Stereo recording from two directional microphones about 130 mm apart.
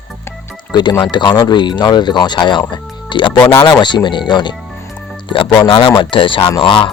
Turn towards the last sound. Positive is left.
turn(degrees=40)  # may be behind; listen again after turning